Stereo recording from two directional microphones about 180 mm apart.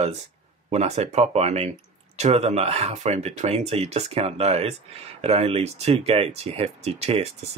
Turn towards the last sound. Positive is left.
turn(degrees=-35)  # may be behind; listen again after turning